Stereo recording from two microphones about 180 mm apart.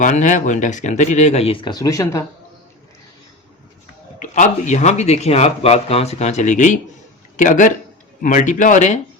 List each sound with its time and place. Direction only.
0.0 s speech: 45° left (ahead or behind)
1.7 s speech: 20° left (ahead or behind)
4.2 s speech: 45° left (ahead or behind)